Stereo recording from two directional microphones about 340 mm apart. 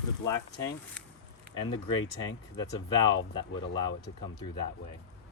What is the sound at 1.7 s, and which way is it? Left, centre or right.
Speech, centre.